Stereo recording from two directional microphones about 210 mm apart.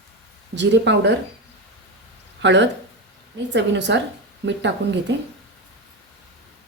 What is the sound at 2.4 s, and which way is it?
A woman's voice, 55° right (ahead or behind).